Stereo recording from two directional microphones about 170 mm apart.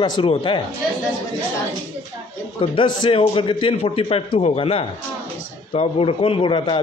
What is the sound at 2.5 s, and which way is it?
A man's voice, 30° left (ahead or behind).